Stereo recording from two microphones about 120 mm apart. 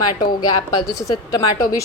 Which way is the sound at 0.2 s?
35° left (ahead or behind).